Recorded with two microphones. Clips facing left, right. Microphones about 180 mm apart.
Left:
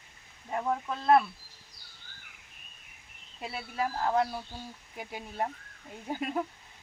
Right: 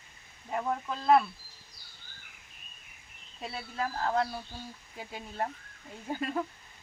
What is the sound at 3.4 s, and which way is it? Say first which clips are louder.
A woman's voice: left 2 dB; 10° left (ahead or behind).